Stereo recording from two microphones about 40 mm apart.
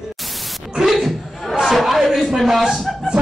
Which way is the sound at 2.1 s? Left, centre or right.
Centre.